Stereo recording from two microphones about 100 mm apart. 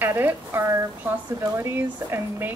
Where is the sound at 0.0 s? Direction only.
25° right (ahead or behind).